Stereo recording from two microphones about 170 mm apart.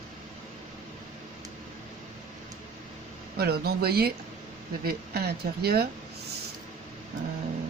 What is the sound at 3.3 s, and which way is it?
Speech, 70° right (ahead or behind).